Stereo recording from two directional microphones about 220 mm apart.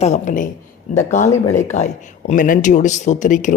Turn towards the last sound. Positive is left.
turn(degrees=35)  # may be behind; listen again after turning